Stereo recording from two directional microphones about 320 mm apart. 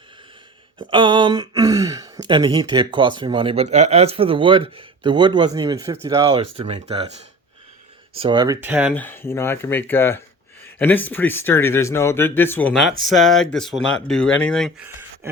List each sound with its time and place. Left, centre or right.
0.8 s speech: centre
8.2 s speech: centre
9.0 s speech: centre